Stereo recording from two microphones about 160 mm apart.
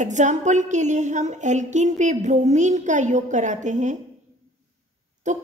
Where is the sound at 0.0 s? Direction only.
50° right (ahead or behind).